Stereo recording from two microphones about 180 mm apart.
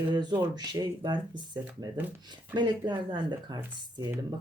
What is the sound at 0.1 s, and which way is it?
Speech, 25° right (ahead or behind).